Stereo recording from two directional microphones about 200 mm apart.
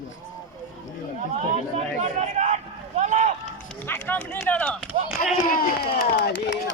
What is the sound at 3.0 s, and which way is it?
Run, 35° right (ahead or behind).